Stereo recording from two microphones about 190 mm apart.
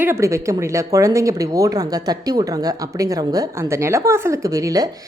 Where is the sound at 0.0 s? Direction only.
15° right (ahead or behind).